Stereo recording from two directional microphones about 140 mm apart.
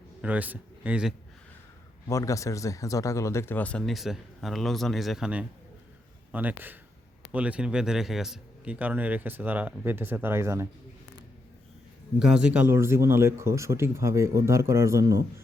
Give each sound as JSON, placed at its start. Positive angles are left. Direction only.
{"t": 0.2, "sound": "a man's voice", "side_deg": -10}
{"t": 2.0, "sound": "speech", "side_deg": 25}
{"t": 12.2, "sound": "speech", "side_deg": -5}